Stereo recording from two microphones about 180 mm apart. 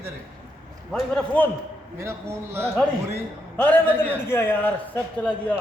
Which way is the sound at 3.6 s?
10° left (ahead or behind).